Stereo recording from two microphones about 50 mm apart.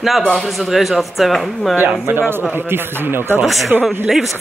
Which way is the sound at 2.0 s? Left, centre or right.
Right.